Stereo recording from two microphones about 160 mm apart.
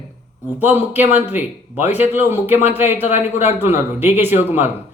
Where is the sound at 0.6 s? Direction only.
10° right (ahead or behind).